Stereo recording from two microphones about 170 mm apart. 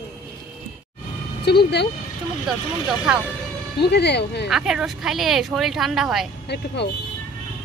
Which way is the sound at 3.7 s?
75° left (ahead or behind).